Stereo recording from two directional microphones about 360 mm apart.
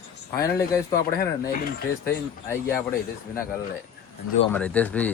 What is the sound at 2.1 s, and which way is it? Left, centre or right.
Speech, centre.